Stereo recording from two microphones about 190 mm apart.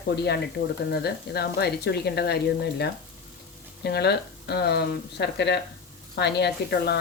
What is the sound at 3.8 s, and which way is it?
A woman's voice, 60° left (ahead or behind).